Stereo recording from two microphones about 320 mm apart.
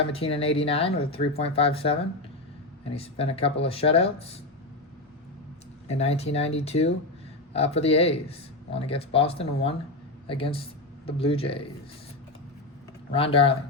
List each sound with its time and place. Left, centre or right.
0.0 s speech: centre
5.9 s speech: centre
13.1 s speech: centre